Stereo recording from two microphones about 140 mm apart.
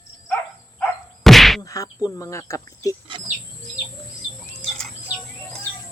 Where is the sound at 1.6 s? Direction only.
25° left (ahead or behind).